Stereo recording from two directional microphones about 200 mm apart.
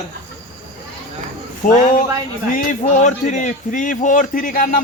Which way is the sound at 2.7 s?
40° left (ahead or behind).